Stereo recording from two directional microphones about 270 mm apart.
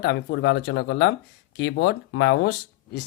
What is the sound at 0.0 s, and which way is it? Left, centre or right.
Speech, left.